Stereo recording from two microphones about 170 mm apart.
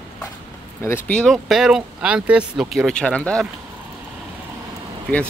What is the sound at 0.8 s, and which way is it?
Speech, 10° left (ahead or behind).